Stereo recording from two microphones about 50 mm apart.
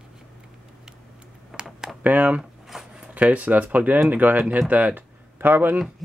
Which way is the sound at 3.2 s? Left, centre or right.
Right.